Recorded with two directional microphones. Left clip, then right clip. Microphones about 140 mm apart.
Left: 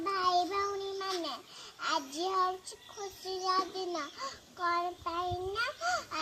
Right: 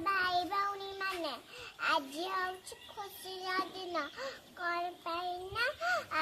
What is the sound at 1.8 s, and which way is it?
Child singing, 20° right (ahead or behind).